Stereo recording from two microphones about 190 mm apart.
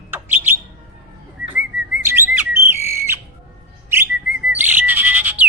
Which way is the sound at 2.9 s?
15° right (ahead or behind).